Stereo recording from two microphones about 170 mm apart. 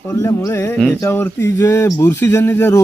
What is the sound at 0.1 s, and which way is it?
Speech, 20° left (ahead or behind).